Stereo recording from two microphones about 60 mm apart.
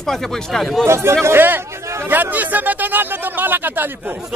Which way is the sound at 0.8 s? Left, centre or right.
Right.